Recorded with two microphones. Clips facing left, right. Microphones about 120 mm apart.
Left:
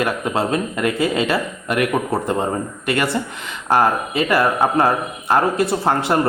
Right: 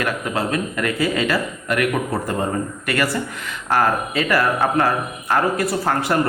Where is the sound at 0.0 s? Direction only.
25° left (ahead or behind).